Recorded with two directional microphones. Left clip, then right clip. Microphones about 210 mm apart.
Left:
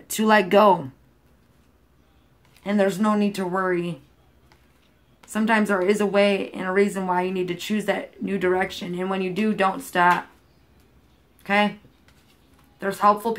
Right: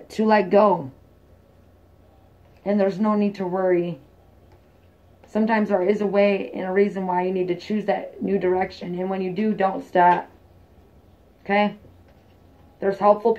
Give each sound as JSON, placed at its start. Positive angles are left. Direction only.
{"t": 0.1, "sound": "speech", "side_deg": 35}
{"t": 2.6, "sound": "speech", "side_deg": 35}
{"t": 5.3, "sound": "speech", "side_deg": 35}
{"t": 12.7, "sound": "speech", "side_deg": 35}